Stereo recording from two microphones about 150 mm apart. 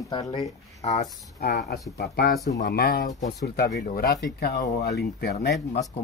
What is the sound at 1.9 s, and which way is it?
A man's voice, 90° left.